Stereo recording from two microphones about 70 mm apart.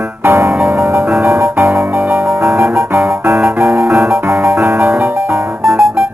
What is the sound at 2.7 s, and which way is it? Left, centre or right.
Music, centre.